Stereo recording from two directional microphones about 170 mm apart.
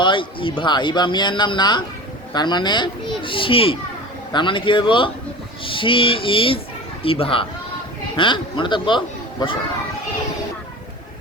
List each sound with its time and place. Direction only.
0.0 s speech: 30° left (ahead or behind)